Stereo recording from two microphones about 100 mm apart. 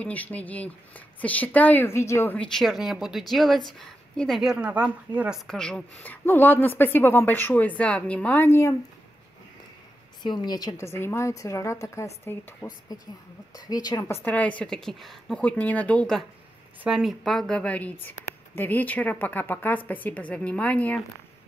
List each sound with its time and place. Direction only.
0.0 s a woman's voice: 15° left (ahead or behind)
2.3 s a woman's voice: 5° left (ahead or behind); by 5.4 s 10° right (ahead or behind)
5.5 s a woman's voice: 10° left (ahead or behind); by 8.7 s 25° left (ahead or behind)
10.2 s a woman's voice: 45° left (ahead or behind)
10.9 s a woman's voice: 25° left (ahead or behind)
12.6 s speech: 40° left (ahead or behind)
14.0 s a woman's voice: 20° left (ahead or behind); by 15.4 s centre (ahead or behind)
15.4 s a woman's voice: 15° left (ahead or behind)